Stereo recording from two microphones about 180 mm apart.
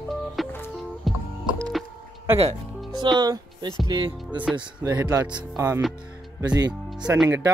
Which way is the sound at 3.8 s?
25° right (ahead or behind).